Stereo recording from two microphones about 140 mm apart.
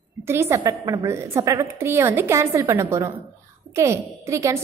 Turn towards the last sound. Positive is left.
turn(degrees=-20)  # may be behind; listen again after turning